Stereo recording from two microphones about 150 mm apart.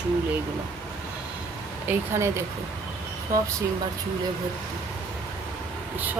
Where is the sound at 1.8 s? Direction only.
15° right (ahead or behind).